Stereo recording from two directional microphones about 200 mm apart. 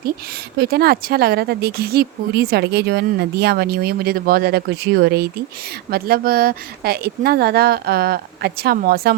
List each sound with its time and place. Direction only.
0.6 s speech: 50° right (ahead or behind)